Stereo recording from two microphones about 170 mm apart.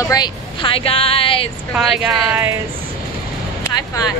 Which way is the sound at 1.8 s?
5° right (ahead or behind).